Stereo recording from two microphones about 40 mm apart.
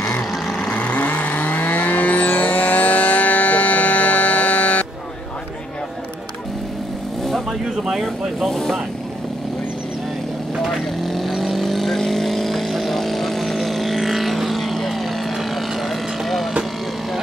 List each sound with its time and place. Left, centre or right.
0.7 s vehicle: left
7.8 s speech: centre
8.5 s vehicle: centre
10.6 s vehicle: centre